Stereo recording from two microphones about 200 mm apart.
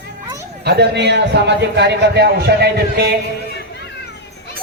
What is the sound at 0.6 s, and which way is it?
A man's voice, 55° right (ahead or behind).